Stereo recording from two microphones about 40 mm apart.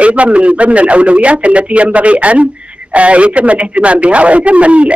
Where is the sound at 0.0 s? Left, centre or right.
Right.